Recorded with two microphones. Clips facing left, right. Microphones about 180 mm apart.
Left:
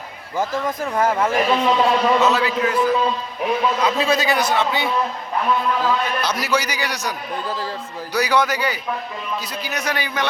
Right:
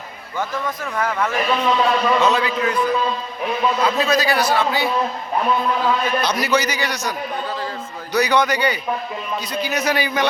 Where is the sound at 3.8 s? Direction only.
25° left (ahead or behind).